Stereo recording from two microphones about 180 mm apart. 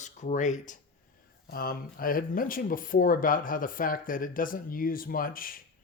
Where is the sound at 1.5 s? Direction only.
55° left (ahead or behind).